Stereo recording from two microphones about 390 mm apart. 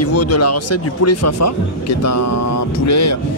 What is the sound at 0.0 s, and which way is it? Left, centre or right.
Speech, left.